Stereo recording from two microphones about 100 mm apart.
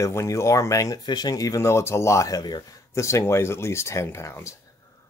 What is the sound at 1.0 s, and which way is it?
Speech, 45° left (ahead or behind).